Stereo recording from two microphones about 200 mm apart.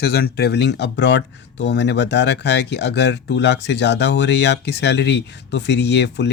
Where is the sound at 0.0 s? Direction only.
50° left (ahead or behind).